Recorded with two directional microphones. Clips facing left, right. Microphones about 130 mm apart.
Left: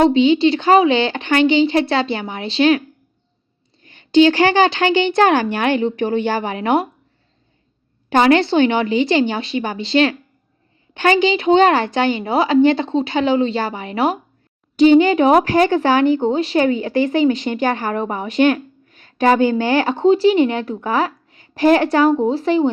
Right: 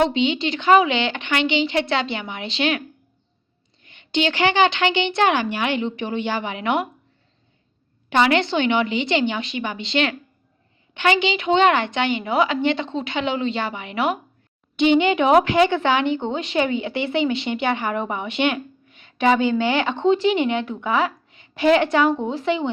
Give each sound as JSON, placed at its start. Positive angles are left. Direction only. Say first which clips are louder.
{"t": 0.0, "sound": "speech", "louder": "left 7 dB", "side_deg": 35}
{"t": 3.8, "sound": "speech", "louder": "left 11 dB", "side_deg": 35}
{"t": 8.1, "sound": "speech", "louder": "left 5 dB", "side_deg": 40}